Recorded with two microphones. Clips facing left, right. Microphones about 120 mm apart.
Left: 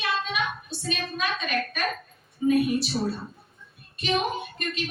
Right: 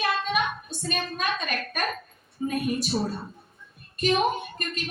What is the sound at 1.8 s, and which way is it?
A woman's voice, 45° right (ahead or behind).